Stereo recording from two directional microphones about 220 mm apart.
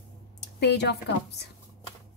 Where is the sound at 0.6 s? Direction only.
50° left (ahead or behind).